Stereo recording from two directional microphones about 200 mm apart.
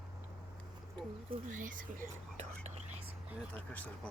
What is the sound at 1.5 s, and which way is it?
Speech, 40° right (ahead or behind).